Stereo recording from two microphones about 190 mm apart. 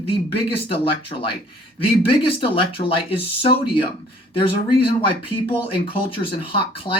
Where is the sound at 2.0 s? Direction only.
30° left (ahead or behind).